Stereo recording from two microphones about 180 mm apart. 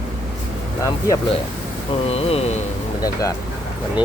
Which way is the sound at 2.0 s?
35° left (ahead or behind).